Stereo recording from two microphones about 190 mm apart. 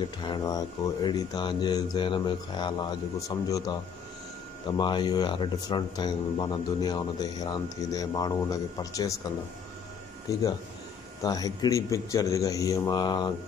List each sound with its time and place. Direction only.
0.0 s speech: 20° left (ahead or behind)
11.2 s speech: 20° left (ahead or behind)